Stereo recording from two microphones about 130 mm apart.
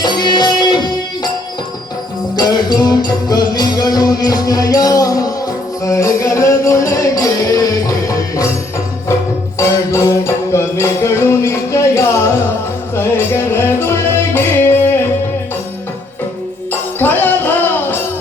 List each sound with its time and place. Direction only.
0.0 s music: 35° left (ahead or behind)
2.3 s music: 30° left (ahead or behind)
9.6 s music: 20° left (ahead or behind)
17.0 s music: 15° left (ahead or behind)